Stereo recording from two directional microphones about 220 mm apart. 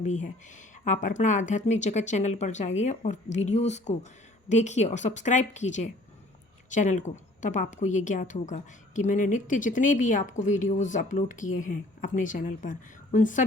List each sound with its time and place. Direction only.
0.0 s a woman's voice: 30° left (ahead or behind)